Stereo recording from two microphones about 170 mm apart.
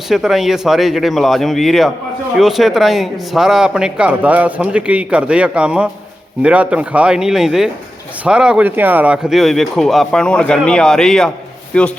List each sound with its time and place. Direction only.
0.1 s speech: centre (ahead or behind)